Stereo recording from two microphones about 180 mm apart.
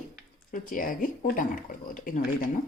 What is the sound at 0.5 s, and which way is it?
A woman's voice, 50° left (ahead or behind).